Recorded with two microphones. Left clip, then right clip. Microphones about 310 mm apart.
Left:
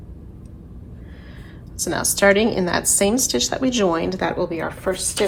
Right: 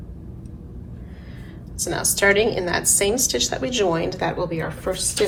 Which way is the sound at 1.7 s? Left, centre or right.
Left.